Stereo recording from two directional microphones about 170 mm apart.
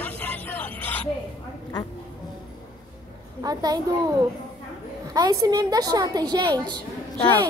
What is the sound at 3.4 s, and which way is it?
Speech, 20° right (ahead or behind).